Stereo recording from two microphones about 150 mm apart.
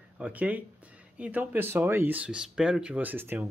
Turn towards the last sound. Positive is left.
turn(degrees=-15)  # may be behind; listen again after turning